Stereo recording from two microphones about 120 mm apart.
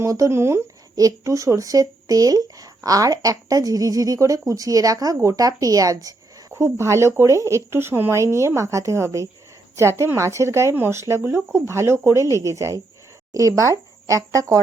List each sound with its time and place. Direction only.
0.0 s speech: 25° right (ahead or behind)